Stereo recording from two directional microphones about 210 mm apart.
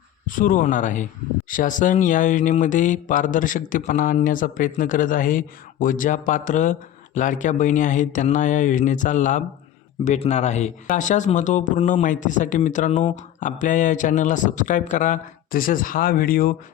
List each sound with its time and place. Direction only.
0.3 s speech: 40° left (ahead or behind)